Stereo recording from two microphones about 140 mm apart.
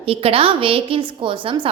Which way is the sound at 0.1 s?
40° right (ahead or behind).